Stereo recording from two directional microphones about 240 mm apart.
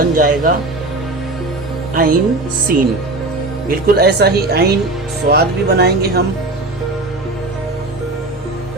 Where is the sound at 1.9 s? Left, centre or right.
Right.